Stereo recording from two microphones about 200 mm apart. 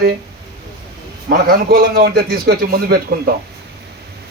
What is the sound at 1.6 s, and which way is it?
Speech, 50° right (ahead or behind).